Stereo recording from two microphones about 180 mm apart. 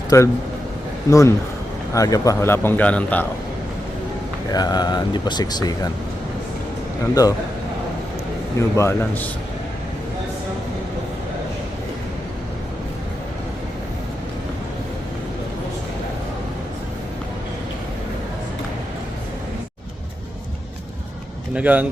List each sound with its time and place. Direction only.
0.1 s a man's voice: 20° left (ahead or behind)
4.5 s speech: 20° left (ahead or behind)
7.1 s speech: 20° left (ahead or behind)
8.5 s a man's voice: 15° left (ahead or behind)
21.5 s speech: 10° right (ahead or behind)